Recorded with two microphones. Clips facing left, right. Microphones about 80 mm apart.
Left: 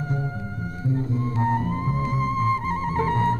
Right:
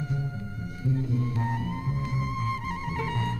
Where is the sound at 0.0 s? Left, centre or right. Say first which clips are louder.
Left 4 dB; left.